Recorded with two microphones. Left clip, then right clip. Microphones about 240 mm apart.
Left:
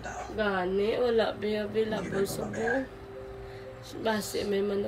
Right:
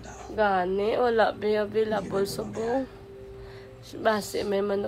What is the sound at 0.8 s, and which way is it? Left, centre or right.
Speech, centre.